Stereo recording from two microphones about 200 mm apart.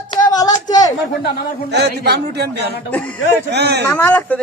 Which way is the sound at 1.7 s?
55° right (ahead or behind).